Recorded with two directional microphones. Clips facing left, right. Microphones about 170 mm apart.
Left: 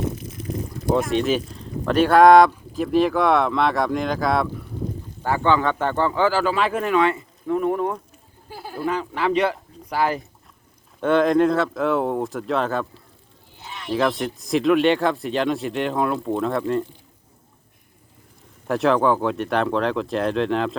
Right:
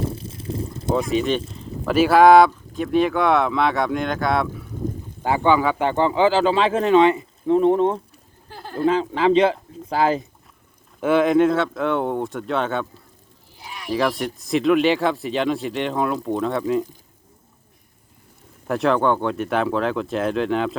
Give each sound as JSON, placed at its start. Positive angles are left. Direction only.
{"t": 0.0, "sound": "water", "side_deg": -30}
{"t": 0.9, "sound": "speech", "side_deg": 0}
{"t": 5.2, "sound": "speech", "side_deg": -15}
{"t": 8.4, "sound": "a sound", "side_deg": 10}
{"t": 8.9, "sound": "speech", "side_deg": -25}
{"t": 11.0, "sound": "speech", "side_deg": -5}
{"t": 13.6, "sound": "speech", "side_deg": -10}
{"t": 18.7, "sound": "speech", "side_deg": 0}